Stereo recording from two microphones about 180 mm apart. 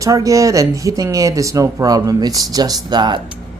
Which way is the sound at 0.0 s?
20° right (ahead or behind).